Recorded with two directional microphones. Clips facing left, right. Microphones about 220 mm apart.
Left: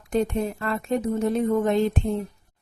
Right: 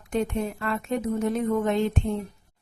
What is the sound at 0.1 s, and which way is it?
Speech, 35° left (ahead or behind).